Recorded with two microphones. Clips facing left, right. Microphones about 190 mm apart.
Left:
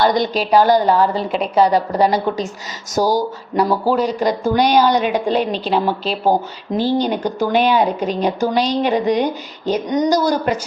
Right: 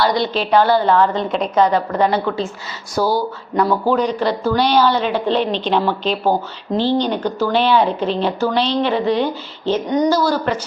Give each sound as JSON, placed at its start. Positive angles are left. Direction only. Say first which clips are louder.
{"t": 0.0, "sound": "speech", "louder": "left 2 dB", "side_deg": 45}
{"t": 0.3, "sound": "speech", "louder": "left 1 dB", "side_deg": 10}
{"t": 2.9, "sound": "speech", "louder": "left 1 dB", "side_deg": 45}
{"t": 3.5, "sound": "speech", "louder": "even", "side_deg": 10}